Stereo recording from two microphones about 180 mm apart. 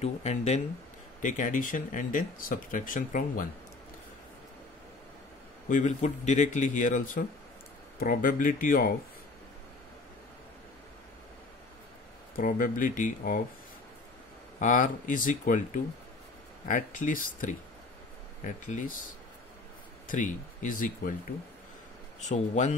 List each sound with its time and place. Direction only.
0.0 s speech: 40° left (ahead or behind)
5.7 s speech: 45° left (ahead or behind)
12.4 s speech: 50° left (ahead or behind)
14.6 s speech: 45° left (ahead or behind)
20.1 s speech: 45° left (ahead or behind)
22.2 s speech: 40° left (ahead or behind)